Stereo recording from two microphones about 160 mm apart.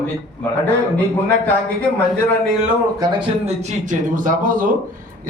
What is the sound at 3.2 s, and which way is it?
A man's voice, 45° right (ahead or behind).